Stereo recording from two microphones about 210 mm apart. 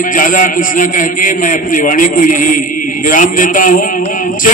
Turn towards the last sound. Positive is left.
turn(degrees=40)  # may be behind; listen again after turning